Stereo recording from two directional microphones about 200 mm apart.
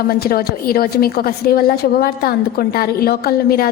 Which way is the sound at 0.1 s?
50° left (ahead or behind).